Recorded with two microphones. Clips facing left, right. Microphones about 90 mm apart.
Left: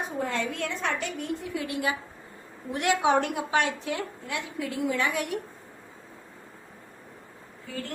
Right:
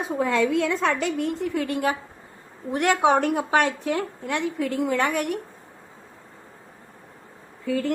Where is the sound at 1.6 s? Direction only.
50° right (ahead or behind).